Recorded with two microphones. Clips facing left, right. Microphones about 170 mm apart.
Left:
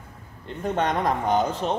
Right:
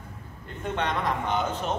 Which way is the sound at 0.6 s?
45° left (ahead or behind).